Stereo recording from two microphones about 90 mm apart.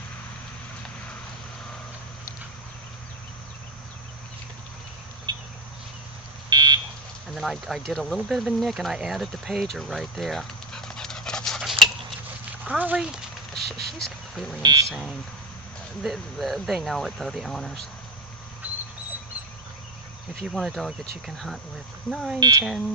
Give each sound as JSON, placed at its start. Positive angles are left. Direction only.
{"t": 6.5, "sound": "buzzer", "side_deg": -50}
{"t": 7.3, "sound": "speech", "side_deg": 0}
{"t": 9.7, "sound": "dog", "side_deg": 0}
{"t": 12.6, "sound": "speech", "side_deg": -15}
{"t": 13.6, "sound": "a sound", "side_deg": 5}
{"t": 14.6, "sound": "speech", "side_deg": -45}
{"t": 14.8, "sound": "speech", "side_deg": 0}
{"t": 18.6, "sound": "dog", "side_deg": -20}
{"t": 20.4, "sound": "speech", "side_deg": 0}
{"t": 22.4, "sound": "speech", "side_deg": -50}